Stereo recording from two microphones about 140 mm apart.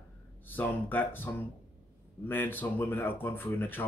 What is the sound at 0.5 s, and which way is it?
Speech, 15° left (ahead or behind).